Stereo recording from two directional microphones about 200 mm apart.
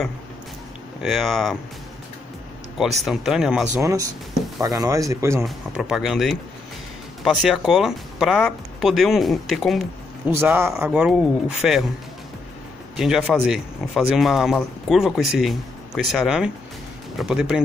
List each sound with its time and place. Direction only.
1.0 s speech: centre (ahead or behind)
3.1 s speech: centre (ahead or behind)
3.7 s speech: 15° right (ahead or behind)
5.4 s speech: 5° right (ahead or behind)
10.3 s speech: 10° right (ahead or behind)
12.9 s speech: centre (ahead or behind)